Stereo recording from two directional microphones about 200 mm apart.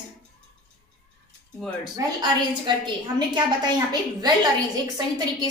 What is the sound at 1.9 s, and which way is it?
A woman's voice, 20° right (ahead or behind).